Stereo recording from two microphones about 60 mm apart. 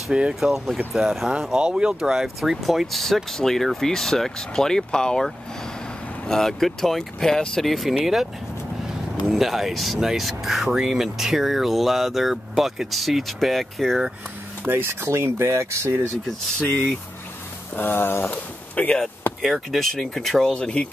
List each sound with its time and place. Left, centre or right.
0.1 s speech: centre
9.3 s speech: centre
14.7 s speech: right
17.7 s speech: left
19.2 s chop: left
19.7 s speech: centre